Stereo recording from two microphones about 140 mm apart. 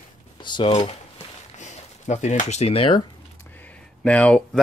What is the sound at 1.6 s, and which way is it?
Speech, 60° left (ahead or behind).